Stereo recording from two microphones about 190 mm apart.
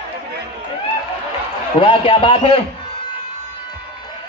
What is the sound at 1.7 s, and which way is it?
Speech, 25° left (ahead or behind).